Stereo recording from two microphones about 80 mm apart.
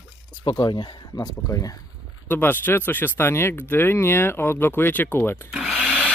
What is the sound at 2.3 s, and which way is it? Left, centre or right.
Speech, left.